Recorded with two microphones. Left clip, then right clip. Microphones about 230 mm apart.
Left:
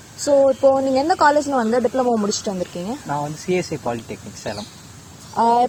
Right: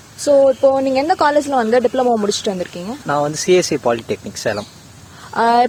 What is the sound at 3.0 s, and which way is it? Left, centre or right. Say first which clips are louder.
Speech: right 10 dB; right.